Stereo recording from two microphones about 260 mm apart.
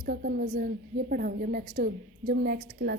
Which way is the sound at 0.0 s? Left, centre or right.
Right.